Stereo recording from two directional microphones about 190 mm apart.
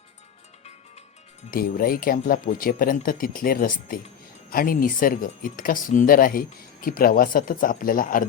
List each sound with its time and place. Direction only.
1.5 s speech: 50° left (ahead or behind)